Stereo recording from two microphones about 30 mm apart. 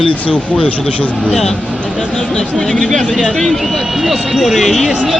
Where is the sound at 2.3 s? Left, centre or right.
Left.